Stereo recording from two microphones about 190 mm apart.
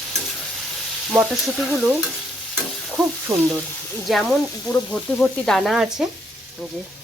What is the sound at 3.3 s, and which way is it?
Speech, 15° right (ahead or behind).